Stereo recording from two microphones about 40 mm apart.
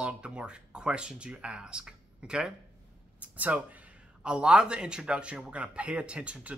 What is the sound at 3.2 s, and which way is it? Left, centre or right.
Speech, right.